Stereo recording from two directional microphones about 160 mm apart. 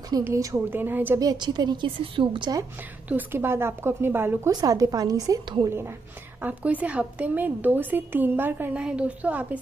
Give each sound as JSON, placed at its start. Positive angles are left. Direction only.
{"t": 0.2, "sound": "a woman's voice", "side_deg": -20}
{"t": 1.2, "sound": "a woman's voice", "side_deg": -25}
{"t": 3.1, "sound": "a woman's voice", "side_deg": -10}